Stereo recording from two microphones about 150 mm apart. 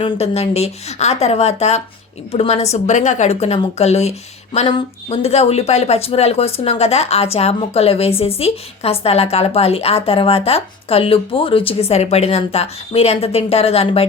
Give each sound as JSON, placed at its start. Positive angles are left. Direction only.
{"t": 0.0, "sound": "a woman's voice", "side_deg": 45}